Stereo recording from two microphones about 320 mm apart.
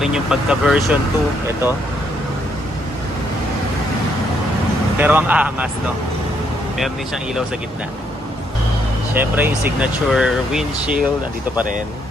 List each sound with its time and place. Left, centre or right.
0.0 s speech: centre
4.9 s speech: centre
9.1 s speech: centre